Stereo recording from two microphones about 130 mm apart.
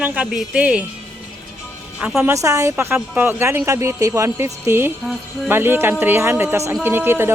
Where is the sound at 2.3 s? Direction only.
25° right (ahead or behind).